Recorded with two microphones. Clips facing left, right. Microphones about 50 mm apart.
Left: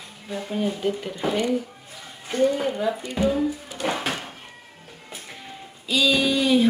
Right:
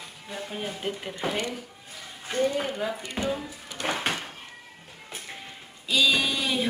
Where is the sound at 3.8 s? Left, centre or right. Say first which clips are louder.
Left 3 dB; right.